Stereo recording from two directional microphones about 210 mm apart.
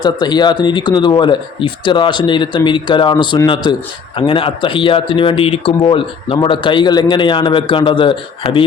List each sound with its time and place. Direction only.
0.0 s speech: 20° left (ahead or behind)